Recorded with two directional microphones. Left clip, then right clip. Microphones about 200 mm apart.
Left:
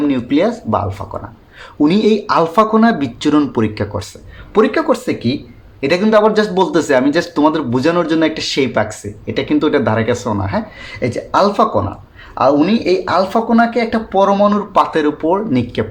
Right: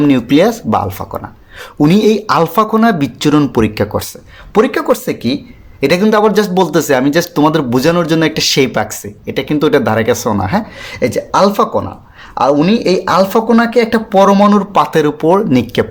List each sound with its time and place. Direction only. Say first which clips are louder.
0.0 s speech: right 5 dB; 45° right (ahead or behind)